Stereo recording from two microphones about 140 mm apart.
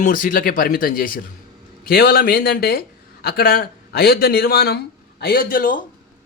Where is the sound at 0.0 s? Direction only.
85° left.